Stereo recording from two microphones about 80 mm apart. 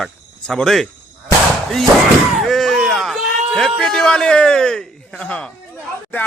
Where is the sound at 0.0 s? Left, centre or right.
Centre.